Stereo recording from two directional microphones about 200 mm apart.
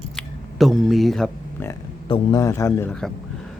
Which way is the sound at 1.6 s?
10° left (ahead or behind).